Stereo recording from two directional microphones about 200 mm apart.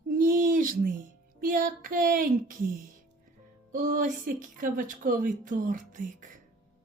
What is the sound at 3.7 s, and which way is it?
Speech, 40° right (ahead or behind).